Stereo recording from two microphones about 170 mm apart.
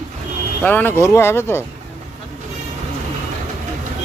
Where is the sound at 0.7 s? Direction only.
10° left (ahead or behind).